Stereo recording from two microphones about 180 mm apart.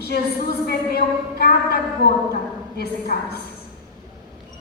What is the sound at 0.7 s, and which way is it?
A woman's voice, 60° left (ahead or behind).